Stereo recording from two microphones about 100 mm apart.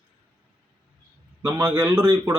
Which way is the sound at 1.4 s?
20° right (ahead or behind).